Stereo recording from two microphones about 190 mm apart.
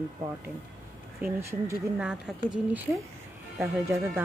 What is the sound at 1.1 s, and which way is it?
Speech, 10° right (ahead or behind).